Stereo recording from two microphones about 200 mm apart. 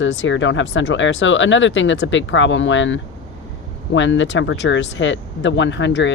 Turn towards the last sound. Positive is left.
turn(degrees=65)  # may be behind; listen again after turning